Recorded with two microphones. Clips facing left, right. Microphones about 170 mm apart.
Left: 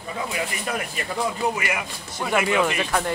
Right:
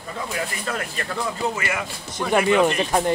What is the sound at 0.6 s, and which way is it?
Speech, 10° left (ahead or behind).